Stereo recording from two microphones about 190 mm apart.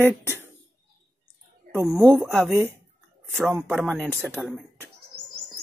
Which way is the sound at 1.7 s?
15° right (ahead or behind).